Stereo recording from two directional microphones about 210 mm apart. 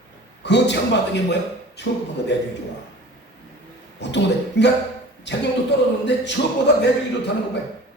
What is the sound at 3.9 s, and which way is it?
Speech, 55° left (ahead or behind).